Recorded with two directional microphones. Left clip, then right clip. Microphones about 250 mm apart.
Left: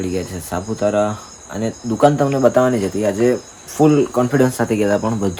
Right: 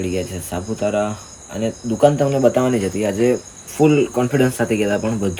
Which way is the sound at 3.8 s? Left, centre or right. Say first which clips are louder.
Left 1 dB; centre.